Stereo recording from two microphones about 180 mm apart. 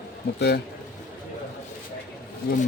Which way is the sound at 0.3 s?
65° left (ahead or behind).